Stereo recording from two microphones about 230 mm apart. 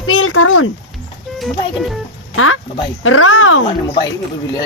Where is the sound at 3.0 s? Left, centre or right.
Left.